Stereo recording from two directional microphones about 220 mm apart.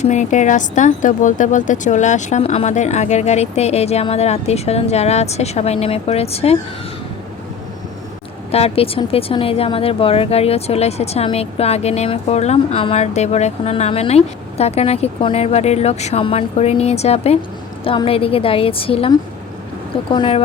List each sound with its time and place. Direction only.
0.0 s speech: 35° left (ahead or behind)
8.5 s speech: 25° left (ahead or behind)